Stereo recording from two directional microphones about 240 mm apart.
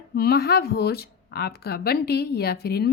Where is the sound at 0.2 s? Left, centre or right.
Left.